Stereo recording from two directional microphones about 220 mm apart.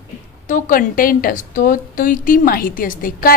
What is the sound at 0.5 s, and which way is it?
A woman's voice, 40° left (ahead or behind).